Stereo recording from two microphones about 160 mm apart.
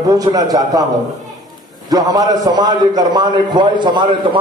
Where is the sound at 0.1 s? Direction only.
25° right (ahead or behind).